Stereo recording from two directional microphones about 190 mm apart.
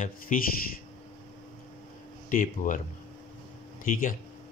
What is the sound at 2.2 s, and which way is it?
Speech, 45° left (ahead or behind).